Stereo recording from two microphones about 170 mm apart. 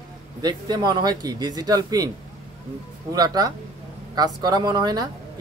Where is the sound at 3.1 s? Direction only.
20° right (ahead or behind).